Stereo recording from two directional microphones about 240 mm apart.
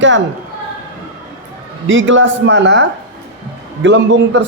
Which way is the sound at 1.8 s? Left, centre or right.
Right.